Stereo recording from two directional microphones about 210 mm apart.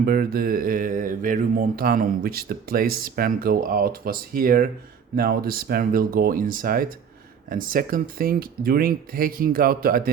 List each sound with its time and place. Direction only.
0.0 s speech: 45° right (ahead or behind)